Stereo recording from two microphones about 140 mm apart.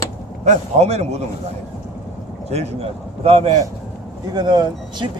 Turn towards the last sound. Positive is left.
turn(degrees=-30)  # may be behind; listen again after turning